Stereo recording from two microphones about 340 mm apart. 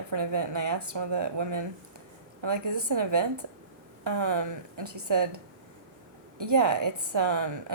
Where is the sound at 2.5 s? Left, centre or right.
Right.